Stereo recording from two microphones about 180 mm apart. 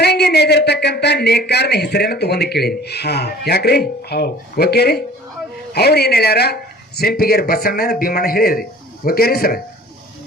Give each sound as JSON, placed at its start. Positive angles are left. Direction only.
{"t": 0.0, "sound": "speech", "side_deg": 65}